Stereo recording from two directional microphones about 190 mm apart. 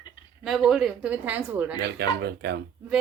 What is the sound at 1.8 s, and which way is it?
Speech, 60° right (ahead or behind).